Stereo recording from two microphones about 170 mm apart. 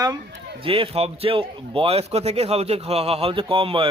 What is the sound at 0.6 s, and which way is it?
A man's voice, 35° right (ahead or behind).